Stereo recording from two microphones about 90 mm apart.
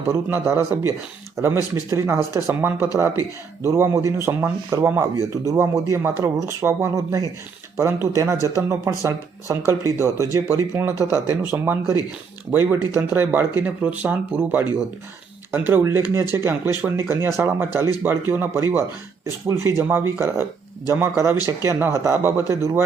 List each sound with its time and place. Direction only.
0.1 s speech: 25° right (ahead or behind)
8.1 s speech: 35° right (ahead or behind)
15.8 s speech: 35° right (ahead or behind)